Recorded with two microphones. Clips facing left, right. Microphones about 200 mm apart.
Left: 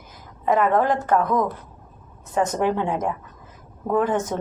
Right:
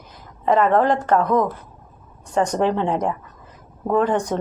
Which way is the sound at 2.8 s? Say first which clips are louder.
Right 3 dB; 20° right (ahead or behind).